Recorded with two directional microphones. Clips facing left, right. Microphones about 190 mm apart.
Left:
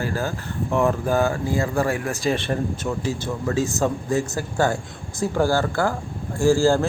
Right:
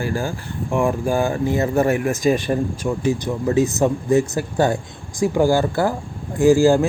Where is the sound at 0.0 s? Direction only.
15° right (ahead or behind).